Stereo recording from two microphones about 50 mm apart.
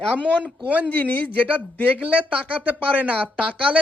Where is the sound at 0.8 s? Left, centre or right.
Left.